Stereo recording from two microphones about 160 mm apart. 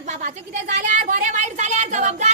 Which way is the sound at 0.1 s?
50° right (ahead or behind).